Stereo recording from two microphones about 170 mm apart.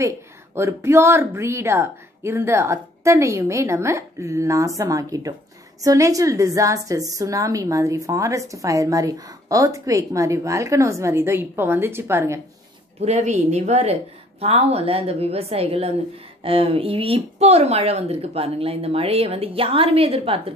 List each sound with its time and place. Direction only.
0.0 s a woman's voice: 15° right (ahead or behind)
13.0 s speech: 40° right (ahead or behind)